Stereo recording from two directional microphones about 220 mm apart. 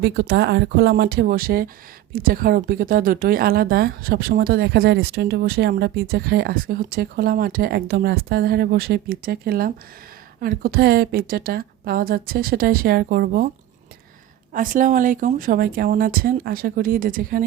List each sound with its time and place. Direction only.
0.0 s a woman's voice: 50° right (ahead or behind)
14.5 s speech: 40° right (ahead or behind)